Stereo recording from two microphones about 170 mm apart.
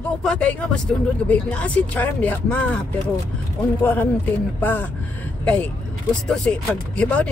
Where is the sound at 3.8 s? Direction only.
10° left (ahead or behind).